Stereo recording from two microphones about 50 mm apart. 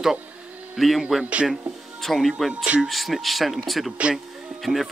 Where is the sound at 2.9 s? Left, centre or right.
Centre.